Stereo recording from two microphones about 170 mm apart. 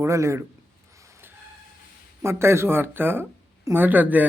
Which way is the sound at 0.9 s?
15° right (ahead or behind).